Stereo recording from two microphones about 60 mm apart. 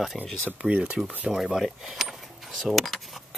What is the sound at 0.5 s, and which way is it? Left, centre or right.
Speech, centre.